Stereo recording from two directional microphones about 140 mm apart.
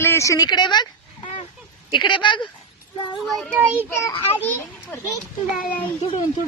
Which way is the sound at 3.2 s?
Centre (ahead or behind).